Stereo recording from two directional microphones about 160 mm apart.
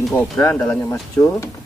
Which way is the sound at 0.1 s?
10° left (ahead or behind).